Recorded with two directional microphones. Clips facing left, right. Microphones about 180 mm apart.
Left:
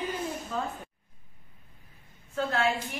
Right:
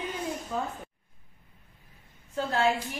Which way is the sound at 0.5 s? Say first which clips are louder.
Right 1 dB; 15° right (ahead or behind).